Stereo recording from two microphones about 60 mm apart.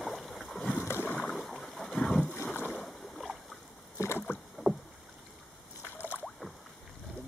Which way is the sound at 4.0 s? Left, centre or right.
Left.